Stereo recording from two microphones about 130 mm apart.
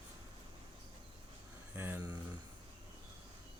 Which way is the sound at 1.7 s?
15° right (ahead or behind).